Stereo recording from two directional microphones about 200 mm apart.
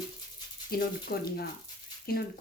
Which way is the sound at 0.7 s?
50° left (ahead or behind).